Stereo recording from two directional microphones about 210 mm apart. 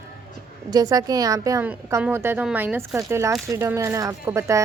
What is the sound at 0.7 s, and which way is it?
A woman's voice, 20° right (ahead or behind).